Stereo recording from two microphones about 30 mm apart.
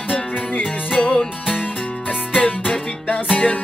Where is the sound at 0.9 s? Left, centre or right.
Left.